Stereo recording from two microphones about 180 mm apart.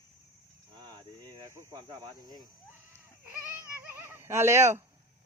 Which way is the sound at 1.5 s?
20° right (ahead or behind).